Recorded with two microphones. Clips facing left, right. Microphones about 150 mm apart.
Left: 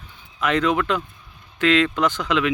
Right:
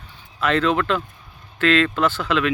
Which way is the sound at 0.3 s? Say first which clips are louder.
Right 1 dB; 15° left (ahead or behind).